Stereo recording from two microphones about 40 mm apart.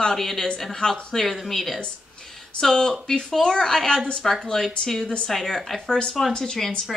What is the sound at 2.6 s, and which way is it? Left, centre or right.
Speech, centre.